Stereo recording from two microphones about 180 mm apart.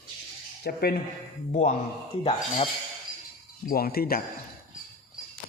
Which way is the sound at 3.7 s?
55° left (ahead or behind).